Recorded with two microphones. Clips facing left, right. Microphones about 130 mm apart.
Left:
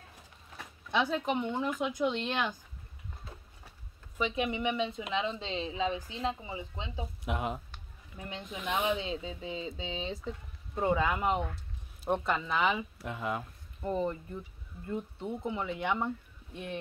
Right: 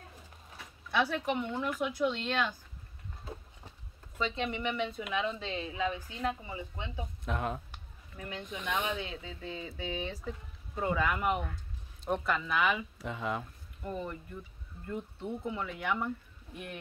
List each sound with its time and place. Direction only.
0.9 s speech: 20° left (ahead or behind)
4.2 s speech: 15° left (ahead or behind)
8.2 s speech: 25° left (ahead or behind)
8.5 s speech: 10° left (ahead or behind); by 12.8 s 25° left (ahead or behind)
13.0 s speech: centre (ahead or behind)
13.8 s speech: 25° left (ahead or behind)